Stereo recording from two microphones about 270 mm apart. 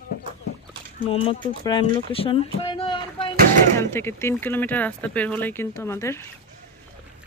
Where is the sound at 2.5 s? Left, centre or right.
Centre.